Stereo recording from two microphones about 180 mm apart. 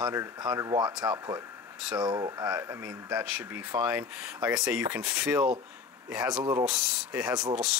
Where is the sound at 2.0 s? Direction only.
20° right (ahead or behind).